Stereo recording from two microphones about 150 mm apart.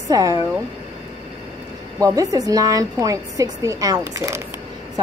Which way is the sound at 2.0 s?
25° right (ahead or behind).